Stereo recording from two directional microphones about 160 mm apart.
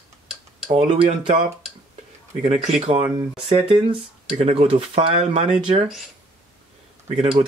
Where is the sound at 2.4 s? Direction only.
40° right (ahead or behind).